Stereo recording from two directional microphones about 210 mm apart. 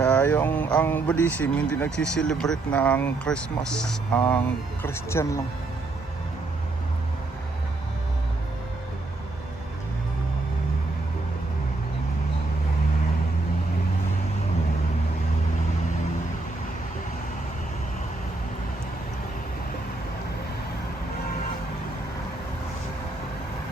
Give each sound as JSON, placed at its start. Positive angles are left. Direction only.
{"t": 0.0, "sound": "speech", "side_deg": 10}